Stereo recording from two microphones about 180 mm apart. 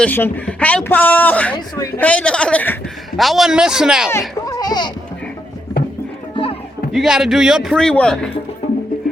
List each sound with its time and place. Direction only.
0.0 s speech: 10° left (ahead or behind)
1.5 s a man's voice: 20° left (ahead or behind)
2.0 s a man's voice: 10° left (ahead or behind)
4.4 s goat: 20° left (ahead or behind)
6.3 s music: 30° left (ahead or behind)
6.9 s a man's voice: 5° right (ahead or behind)